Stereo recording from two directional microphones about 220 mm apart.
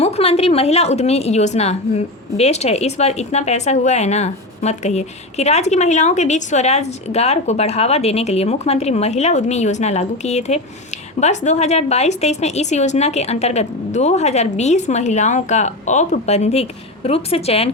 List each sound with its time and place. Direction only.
0.0 s a woman's voice: 25° left (ahead or behind)